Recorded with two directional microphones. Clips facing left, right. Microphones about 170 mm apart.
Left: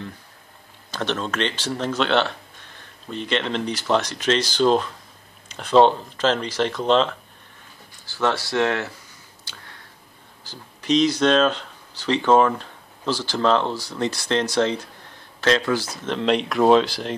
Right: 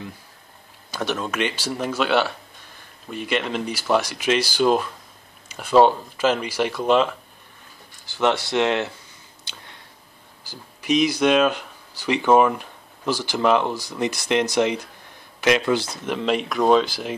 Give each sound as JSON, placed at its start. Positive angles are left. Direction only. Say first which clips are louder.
{"t": 0.9, "sound": "speech", "louder": "even", "side_deg": -10}
{"t": 9.4, "sound": "a sound", "louder": "right 1 dB", "side_deg": -20}
{"t": 10.4, "sound": "speech", "louder": "left 1 dB", "side_deg": -10}
{"t": 16.1, "sound": "speech", "louder": "left 2 dB", "side_deg": -5}